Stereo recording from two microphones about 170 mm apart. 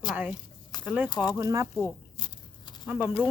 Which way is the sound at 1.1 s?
25° left (ahead or behind).